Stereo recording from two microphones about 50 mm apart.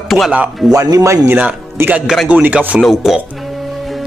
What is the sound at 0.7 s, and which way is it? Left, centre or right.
Speech, right.